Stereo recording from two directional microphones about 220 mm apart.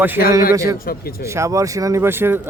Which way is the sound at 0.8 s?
40° left (ahead or behind).